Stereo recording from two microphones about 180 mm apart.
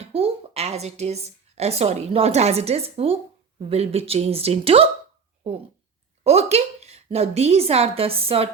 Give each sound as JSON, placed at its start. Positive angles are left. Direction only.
{"t": 0.0, "sound": "a woman's voice", "side_deg": -35}
{"t": 6.2, "sound": "a woman's voice", "side_deg": -35}